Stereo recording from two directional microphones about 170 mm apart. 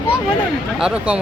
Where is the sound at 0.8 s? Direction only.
5° right (ahead or behind).